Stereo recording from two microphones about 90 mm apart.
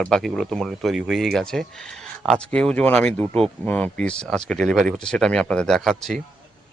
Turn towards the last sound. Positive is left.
turn(degrees=5)  # may be behind; listen again after turning